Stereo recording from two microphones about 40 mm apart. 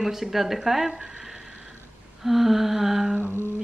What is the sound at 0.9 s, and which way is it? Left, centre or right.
Speech, right.